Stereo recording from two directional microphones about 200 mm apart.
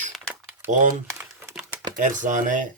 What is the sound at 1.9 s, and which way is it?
Speech, 40° right (ahead or behind).